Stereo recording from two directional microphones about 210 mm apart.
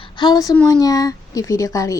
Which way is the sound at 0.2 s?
20° left (ahead or behind).